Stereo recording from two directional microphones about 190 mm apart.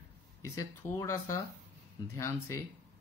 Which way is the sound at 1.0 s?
15° left (ahead or behind).